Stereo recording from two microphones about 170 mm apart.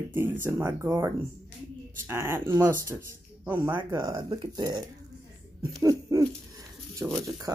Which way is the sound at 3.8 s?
20° right (ahead or behind).